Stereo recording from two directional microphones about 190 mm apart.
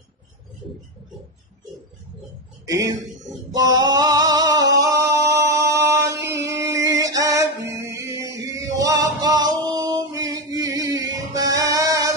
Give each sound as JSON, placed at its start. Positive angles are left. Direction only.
{"t": 2.6, "sound": "a man's voice", "side_deg": -20}
{"t": 3.5, "sound": "singing", "side_deg": -20}
{"t": 6.5, "sound": "a sound", "side_deg": -15}
{"t": 8.7, "sound": "male singing", "side_deg": -20}